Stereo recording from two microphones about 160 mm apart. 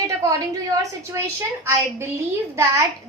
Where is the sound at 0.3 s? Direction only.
20° right (ahead or behind).